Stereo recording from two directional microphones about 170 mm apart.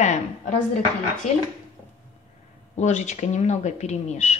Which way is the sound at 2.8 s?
45° left (ahead or behind).